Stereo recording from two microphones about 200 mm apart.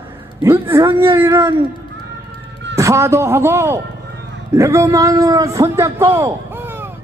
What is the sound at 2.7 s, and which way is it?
A man's voice, 15° right (ahead or behind).